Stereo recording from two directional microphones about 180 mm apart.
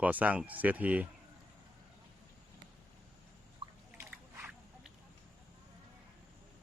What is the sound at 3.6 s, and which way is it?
Drip, 25° right (ahead or behind).